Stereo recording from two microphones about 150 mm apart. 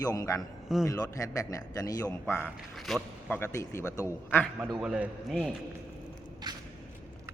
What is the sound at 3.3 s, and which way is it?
A man's voice, 15° left (ahead or behind).